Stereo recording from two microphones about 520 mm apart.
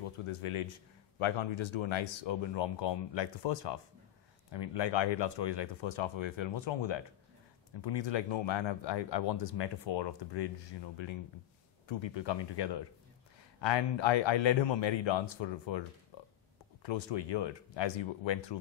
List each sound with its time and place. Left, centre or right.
0.0 s speech: left
16.1 s a sound: left
16.8 s speech: left